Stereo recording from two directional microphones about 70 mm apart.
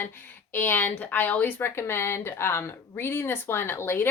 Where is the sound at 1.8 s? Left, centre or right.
Left.